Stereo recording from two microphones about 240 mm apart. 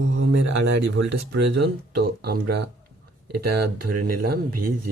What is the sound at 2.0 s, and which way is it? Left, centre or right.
Speech, right.